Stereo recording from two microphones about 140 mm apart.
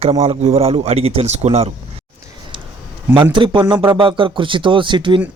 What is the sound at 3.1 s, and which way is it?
Speech, 35° right (ahead or behind).